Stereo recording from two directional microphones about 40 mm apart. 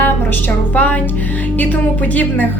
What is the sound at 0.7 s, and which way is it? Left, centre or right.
Speech, left.